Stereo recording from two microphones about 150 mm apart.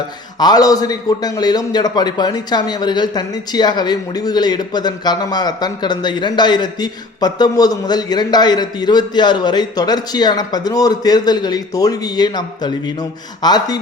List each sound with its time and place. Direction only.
0.3 s a man's voice: 25° left (ahead or behind)